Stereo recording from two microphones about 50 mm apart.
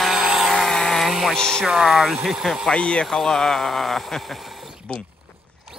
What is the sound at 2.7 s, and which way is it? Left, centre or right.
Speech, centre.